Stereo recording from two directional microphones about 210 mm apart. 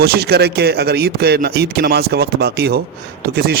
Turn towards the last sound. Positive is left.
turn(degrees=-50)  # may be behind; listen again after turning